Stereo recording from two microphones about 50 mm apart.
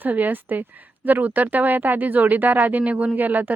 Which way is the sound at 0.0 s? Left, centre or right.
Right.